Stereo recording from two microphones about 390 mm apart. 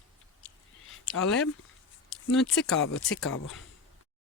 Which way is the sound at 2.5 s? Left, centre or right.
Left.